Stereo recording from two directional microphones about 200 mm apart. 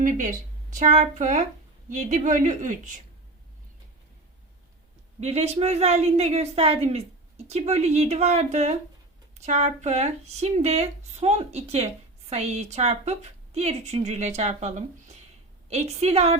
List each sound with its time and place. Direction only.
0.0 s speech: 40° right (ahead or behind)
5.2 s speech: 30° right (ahead or behind)